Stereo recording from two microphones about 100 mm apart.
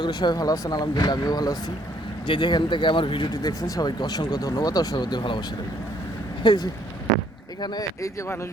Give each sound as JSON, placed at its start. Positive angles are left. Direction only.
{"t": 0.0, "sound": "speech", "side_deg": 45}
{"t": 2.2, "sound": "speech", "side_deg": 55}
{"t": 3.4, "sound": "speech", "side_deg": 35}
{"t": 6.4, "sound": "speech", "side_deg": 50}